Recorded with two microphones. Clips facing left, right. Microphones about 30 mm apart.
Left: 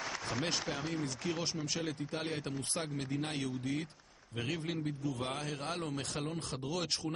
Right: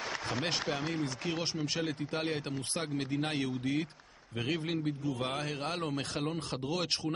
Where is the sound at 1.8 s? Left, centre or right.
Centre.